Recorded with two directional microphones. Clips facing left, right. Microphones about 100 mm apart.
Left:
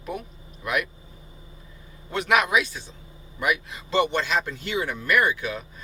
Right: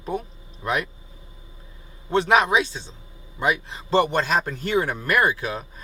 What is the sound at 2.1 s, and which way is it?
A man's voice, 30° right (ahead or behind).